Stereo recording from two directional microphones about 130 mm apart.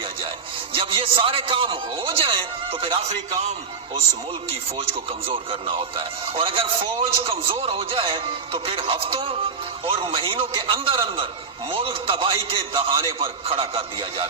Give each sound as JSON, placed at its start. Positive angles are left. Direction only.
{"t": 0.8, "sound": "a man's voice", "side_deg": -45}
{"t": 4.8, "sound": "a man's voice", "side_deg": -45}